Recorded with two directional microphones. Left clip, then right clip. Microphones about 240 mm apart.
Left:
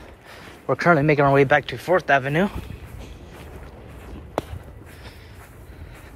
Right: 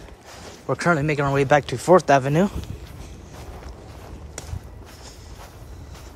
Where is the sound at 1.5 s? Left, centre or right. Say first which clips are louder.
Right 3 dB; right.